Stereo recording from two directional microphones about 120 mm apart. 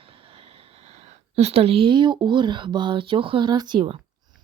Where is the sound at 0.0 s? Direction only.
50° right (ahead or behind).